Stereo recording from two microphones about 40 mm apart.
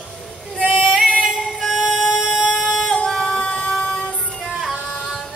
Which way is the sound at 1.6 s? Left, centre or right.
Centre.